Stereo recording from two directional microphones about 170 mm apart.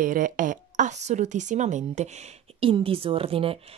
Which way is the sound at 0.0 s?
50° right (ahead or behind).